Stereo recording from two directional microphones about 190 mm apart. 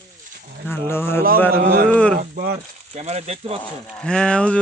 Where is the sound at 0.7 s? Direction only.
10° left (ahead or behind).